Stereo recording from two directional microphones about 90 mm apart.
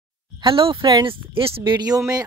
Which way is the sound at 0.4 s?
75° right (ahead or behind).